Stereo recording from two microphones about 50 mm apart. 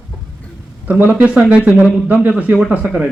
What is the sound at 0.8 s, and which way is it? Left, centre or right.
A man's voice, right.